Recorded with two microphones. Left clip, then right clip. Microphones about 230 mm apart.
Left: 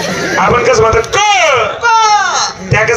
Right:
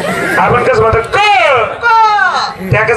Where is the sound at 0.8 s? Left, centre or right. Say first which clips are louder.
Even; centre.